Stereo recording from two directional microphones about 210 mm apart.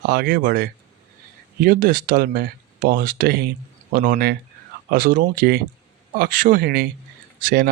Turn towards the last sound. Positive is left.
turn(degrees=-45)  # may be behind; listen again after turning